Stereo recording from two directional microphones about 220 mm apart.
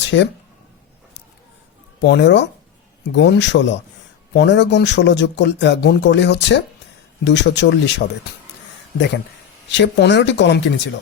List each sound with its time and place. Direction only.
0.0 s speech: 50° left (ahead or behind)
2.0 s speech: 50° left (ahead or behind)
9.6 s speech: 50° left (ahead or behind)